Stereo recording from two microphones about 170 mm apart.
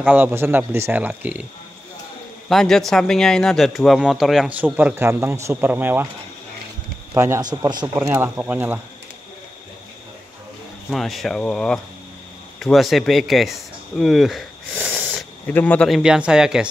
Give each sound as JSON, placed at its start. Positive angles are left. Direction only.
{"t": 0.0, "sound": "speech", "side_deg": -10}
{"t": 2.5, "sound": "speech", "side_deg": 0}
{"t": 7.2, "sound": "speech", "side_deg": -20}
{"t": 8.1, "sound": "speech", "side_deg": -10}
{"t": 10.9, "sound": "speech", "side_deg": 0}
{"t": 15.1, "sound": "speech", "side_deg": 10}